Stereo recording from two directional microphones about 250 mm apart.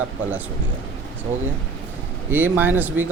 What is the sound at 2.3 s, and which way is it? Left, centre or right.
Speech, centre.